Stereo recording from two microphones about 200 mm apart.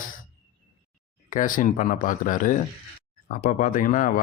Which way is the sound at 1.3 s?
40° left (ahead or behind).